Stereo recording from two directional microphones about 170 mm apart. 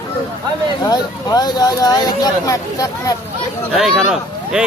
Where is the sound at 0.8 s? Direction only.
25° left (ahead or behind).